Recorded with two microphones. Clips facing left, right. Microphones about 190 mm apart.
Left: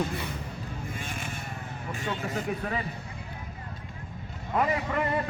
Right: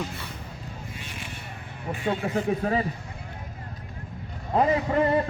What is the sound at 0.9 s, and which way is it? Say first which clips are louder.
Vehicle: left 3 dB; 50° left (ahead or behind).